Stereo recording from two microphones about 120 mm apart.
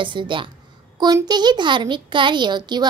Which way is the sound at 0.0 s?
45° right (ahead or behind).